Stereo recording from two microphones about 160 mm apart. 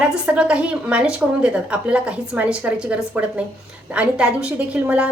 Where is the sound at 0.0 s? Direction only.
5° right (ahead or behind).